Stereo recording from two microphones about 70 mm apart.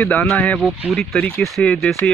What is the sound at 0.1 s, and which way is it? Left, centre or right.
Speech, left.